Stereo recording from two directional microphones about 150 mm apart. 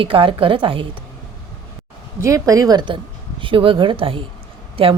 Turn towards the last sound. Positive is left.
turn(degrees=-40)  # may be behind; listen again after turning